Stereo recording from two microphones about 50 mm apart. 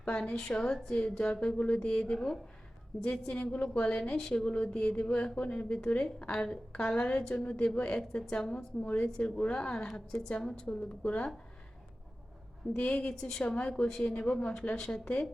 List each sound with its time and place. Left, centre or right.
0.0 s a woman's voice: centre
3.0 s a woman's voice: left
12.7 s a woman's voice: left
14.8 s a woman's voice: centre